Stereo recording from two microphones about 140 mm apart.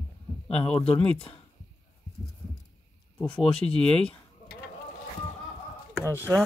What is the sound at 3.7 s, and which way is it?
Speech, 5° left (ahead or behind).